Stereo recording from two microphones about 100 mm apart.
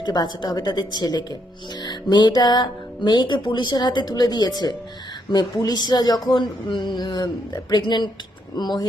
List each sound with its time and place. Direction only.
0.0 s speech: 45° left (ahead or behind)